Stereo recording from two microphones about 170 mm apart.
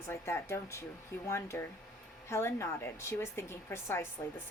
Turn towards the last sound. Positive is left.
turn(degrees=15)  # may be behind; listen again after turning